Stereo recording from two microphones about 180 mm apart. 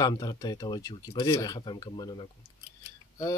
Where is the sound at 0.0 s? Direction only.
20° left (ahead or behind).